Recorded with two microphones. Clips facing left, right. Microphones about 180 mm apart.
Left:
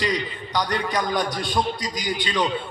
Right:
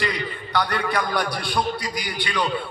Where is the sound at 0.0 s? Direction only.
15° left (ahead or behind).